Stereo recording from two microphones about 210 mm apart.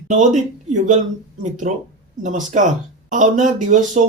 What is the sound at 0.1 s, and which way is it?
Speech, 35° right (ahead or behind).